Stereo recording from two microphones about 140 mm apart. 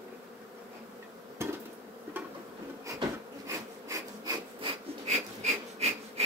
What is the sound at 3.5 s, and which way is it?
Wood, 25° right (ahead or behind).